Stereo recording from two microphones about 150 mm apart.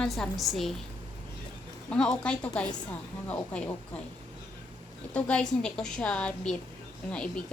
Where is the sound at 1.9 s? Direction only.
5° left (ahead or behind).